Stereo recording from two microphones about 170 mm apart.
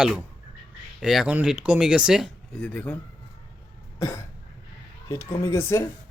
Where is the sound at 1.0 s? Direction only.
Centre (ahead or behind).